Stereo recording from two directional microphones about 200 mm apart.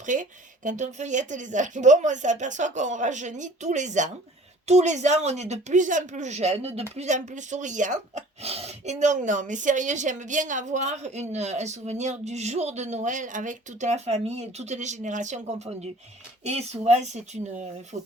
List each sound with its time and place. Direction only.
0.0 s speech: 40° right (ahead or behind)